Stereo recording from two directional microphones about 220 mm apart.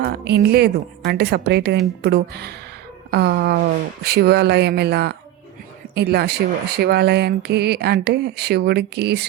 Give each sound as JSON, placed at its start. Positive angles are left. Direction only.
{"t": 0.0, "sound": "speech", "side_deg": -50}